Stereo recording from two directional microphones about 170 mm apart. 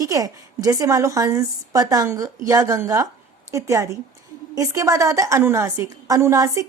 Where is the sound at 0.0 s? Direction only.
20° right (ahead or behind).